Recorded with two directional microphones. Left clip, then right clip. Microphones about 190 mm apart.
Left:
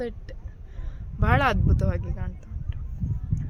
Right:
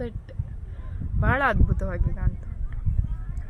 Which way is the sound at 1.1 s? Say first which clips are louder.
Even; 60° left (ahead or behind).